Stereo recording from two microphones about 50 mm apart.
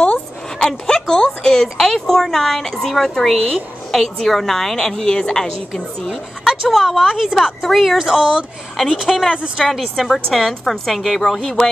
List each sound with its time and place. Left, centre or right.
0.6 s a woman's voice: centre
6.0 s a woman's voice: centre
7.6 s a woman's voice: centre
8.0 s a woman's voice: centre